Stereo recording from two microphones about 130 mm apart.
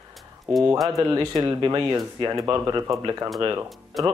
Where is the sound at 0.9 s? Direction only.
25° right (ahead or behind).